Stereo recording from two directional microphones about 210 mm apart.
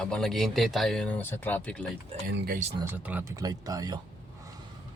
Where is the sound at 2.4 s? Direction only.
45° right (ahead or behind).